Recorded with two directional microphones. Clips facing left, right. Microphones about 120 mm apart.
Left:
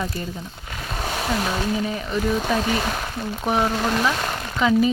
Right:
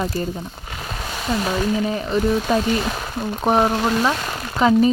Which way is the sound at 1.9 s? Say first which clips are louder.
Right 4 dB; 35° right (ahead or behind).